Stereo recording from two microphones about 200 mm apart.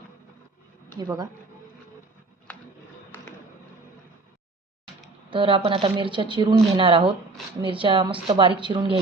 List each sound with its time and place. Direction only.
0.9 s a woman's voice: 20° right (ahead or behind)
2.5 s a sound: 5° left (ahead or behind)
5.3 s a woman's voice: 25° right (ahead or behind)